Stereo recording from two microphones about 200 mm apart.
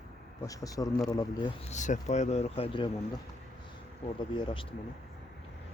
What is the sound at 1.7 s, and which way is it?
Speech, 35° left (ahead or behind).